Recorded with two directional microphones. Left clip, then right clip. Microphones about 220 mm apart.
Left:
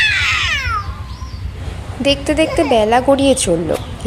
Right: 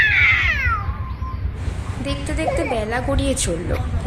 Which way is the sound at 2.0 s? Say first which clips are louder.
Left 11 dB; 35° left (ahead or behind).